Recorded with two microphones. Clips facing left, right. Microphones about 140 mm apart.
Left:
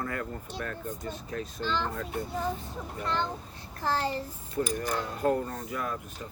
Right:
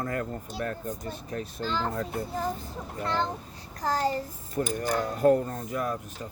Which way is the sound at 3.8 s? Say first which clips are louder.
Right 2 dB; 40° right (ahead or behind).